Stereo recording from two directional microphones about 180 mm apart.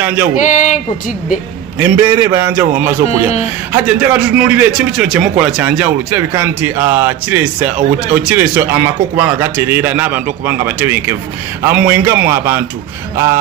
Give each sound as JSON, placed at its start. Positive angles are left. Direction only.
{"t": 0.0, "sound": "speech", "side_deg": -10}
{"t": 0.4, "sound": "speech", "side_deg": 45}
{"t": 1.8, "sound": "a man's voice", "side_deg": -15}
{"t": 3.1, "sound": "speech", "side_deg": 35}
{"t": 3.7, "sound": "a man's voice", "side_deg": -10}